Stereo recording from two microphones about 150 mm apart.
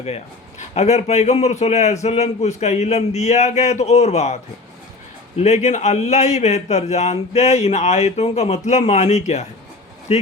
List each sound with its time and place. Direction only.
0.7 s a man's voice: 50° left (ahead or behind)
5.4 s a man's voice: 50° left (ahead or behind)